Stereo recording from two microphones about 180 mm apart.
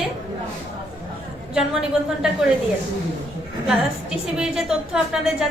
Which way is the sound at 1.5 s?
5° right (ahead or behind).